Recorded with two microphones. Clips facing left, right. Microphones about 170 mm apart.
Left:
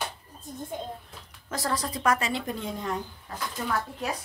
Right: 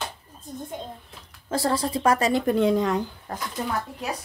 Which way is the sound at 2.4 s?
75° right (ahead or behind).